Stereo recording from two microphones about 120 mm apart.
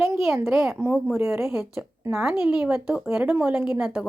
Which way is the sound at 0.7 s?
20° right (ahead or behind).